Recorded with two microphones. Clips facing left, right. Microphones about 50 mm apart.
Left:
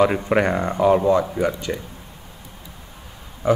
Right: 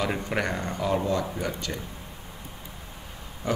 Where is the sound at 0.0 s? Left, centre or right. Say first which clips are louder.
Left 10 dB; left.